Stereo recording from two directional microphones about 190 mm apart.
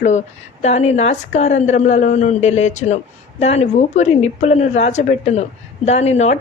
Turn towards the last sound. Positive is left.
turn(degrees=35)  # may be behind; listen again after turning